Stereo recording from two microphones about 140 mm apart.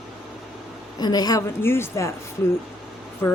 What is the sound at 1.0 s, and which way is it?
Speech, 30° left (ahead or behind).